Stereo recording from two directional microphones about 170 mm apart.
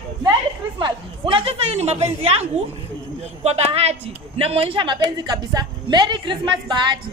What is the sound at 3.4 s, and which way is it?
A woman's voice, 40° right (ahead or behind).